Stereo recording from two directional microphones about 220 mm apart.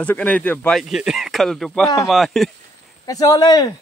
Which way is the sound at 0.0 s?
5° left (ahead or behind).